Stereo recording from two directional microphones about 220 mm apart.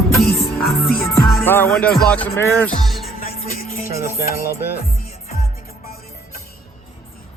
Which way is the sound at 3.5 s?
40° left (ahead or behind).